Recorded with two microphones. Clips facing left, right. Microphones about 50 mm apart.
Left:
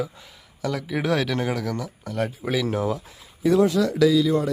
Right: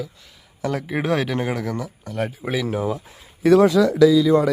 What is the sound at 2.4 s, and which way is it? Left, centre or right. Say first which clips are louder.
Speech: even; centre.